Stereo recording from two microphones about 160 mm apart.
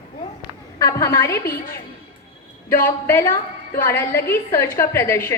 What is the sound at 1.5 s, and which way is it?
Speech, 70° left (ahead or behind).